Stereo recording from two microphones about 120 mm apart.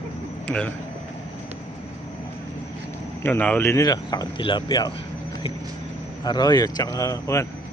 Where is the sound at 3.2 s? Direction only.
15° left (ahead or behind); by 4.9 s 35° left (ahead or behind).